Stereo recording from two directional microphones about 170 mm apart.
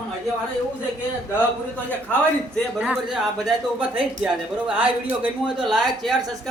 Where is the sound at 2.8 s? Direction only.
5° right (ahead or behind).